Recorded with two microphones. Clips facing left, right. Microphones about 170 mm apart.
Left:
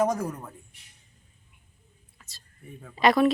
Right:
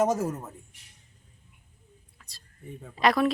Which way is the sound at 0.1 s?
25° right (ahead or behind).